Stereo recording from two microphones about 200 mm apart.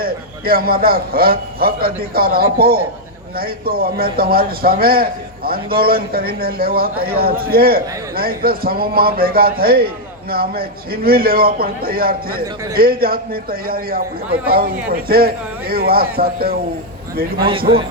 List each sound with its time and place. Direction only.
0.0 s a man's voice: 50° right (ahead or behind)
17.3 s a man's voice: 25° right (ahead or behind)